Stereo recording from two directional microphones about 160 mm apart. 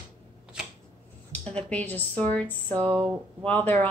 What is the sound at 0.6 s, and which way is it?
Shuffling cards, 5° right (ahead or behind).